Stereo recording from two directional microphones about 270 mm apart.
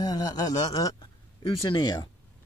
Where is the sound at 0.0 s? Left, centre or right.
Centre.